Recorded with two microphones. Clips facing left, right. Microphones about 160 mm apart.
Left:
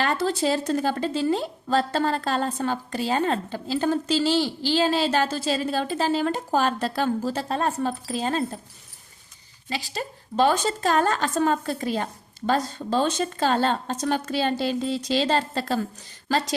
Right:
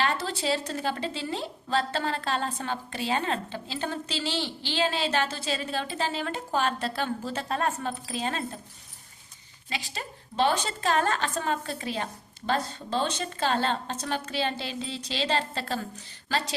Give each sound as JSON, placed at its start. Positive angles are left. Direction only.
{"t": 0.0, "sound": "speech", "side_deg": 45}
{"t": 9.6, "sound": "a woman's voice", "side_deg": 40}